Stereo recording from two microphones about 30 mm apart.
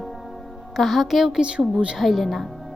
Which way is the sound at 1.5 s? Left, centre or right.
Right.